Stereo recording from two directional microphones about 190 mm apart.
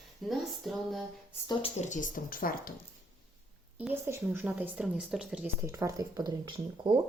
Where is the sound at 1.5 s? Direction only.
35° left (ahead or behind).